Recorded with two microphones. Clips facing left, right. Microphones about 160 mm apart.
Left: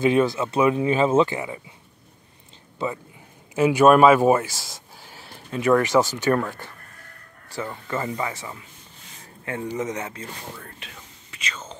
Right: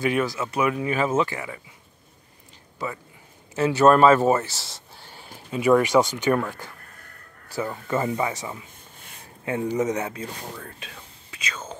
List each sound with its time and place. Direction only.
0.0 s speech: 25° left (ahead or behind)
3.5 s speech: 15° left (ahead or behind)
5.5 s speech: 5° right (ahead or behind)
7.4 s speech: 10° right (ahead or behind)
11.4 s speech: 10° right (ahead or behind)